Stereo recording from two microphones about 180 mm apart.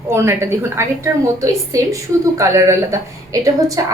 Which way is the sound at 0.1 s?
15° right (ahead or behind).